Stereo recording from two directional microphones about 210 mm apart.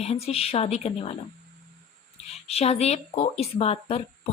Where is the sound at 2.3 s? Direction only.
30° left (ahead or behind).